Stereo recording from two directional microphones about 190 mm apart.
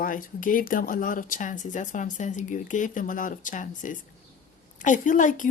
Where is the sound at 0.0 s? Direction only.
45° left (ahead or behind).